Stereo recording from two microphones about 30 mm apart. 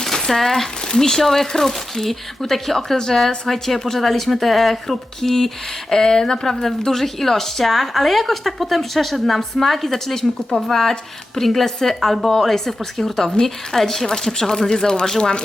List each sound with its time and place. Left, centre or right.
0.0 s a sound: centre
0.9 s speech: centre
5.9 s speech: centre
6.5 s a woman's voice: centre; by 15.1 s left